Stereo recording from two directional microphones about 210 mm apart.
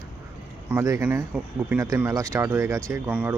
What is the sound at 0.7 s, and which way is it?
Speech, 10° right (ahead or behind).